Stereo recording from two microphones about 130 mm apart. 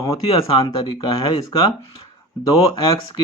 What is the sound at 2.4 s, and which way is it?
Speech, 30° left (ahead or behind).